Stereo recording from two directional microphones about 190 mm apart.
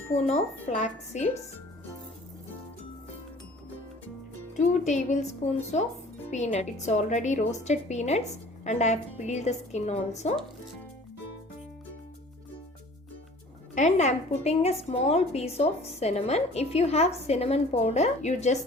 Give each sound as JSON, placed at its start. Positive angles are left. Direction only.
{"t": 0.3, "sound": "a woman's voice", "side_deg": 35}
{"t": 4.5, "sound": "a woman's voice", "side_deg": 40}
{"t": 13.7, "sound": "a woman's voice", "side_deg": 40}